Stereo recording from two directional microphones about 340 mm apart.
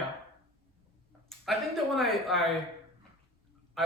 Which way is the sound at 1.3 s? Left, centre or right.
Centre.